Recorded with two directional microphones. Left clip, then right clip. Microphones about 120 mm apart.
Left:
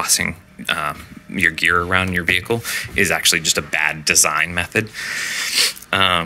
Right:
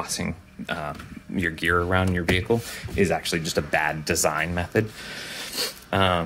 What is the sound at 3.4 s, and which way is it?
Speech, 35° right (ahead or behind).